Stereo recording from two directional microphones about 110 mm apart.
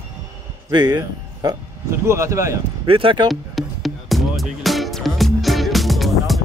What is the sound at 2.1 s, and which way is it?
Speech, 25° right (ahead or behind).